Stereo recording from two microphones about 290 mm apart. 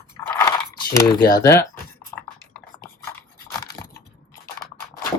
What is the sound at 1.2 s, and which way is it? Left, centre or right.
Speech, left.